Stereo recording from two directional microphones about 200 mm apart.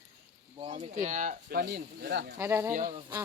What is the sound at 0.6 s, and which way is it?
Speech, 30° right (ahead or behind).